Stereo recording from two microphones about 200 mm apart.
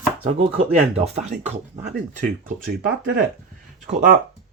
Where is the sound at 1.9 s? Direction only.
45° right (ahead or behind).